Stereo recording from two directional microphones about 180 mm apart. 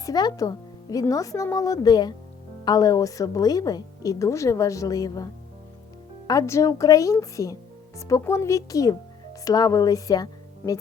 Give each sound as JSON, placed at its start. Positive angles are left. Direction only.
{"t": 0.0, "sound": "a woman's voice", "side_deg": 20}